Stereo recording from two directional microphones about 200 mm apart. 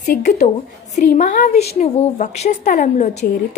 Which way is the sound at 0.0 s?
40° left (ahead or behind).